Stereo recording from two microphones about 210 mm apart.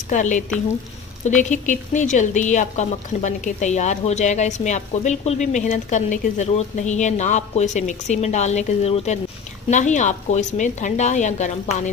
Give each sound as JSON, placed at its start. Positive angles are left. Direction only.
{"t": 0.1, "sound": "a woman's voice", "side_deg": 35}